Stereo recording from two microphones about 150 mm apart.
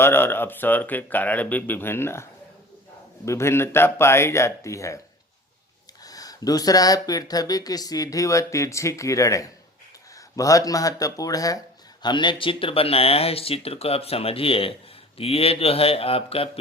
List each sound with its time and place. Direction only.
0.0 s speech: 15° left (ahead or behind)
3.2 s speech: 15° left (ahead or behind)
6.0 s speech: 25° left (ahead or behind)